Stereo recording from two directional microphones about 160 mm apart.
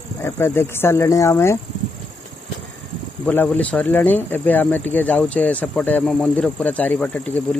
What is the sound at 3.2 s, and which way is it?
Speech, 10° left (ahead or behind).